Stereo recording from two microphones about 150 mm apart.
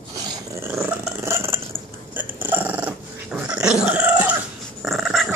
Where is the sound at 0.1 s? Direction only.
15° right (ahead or behind); by 5.3 s centre (ahead or behind).